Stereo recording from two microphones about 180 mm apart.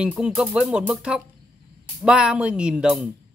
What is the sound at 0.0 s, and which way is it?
Speech, 5° right (ahead or behind).